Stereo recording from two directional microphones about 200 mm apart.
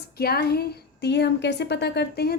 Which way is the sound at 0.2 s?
50° left (ahead or behind).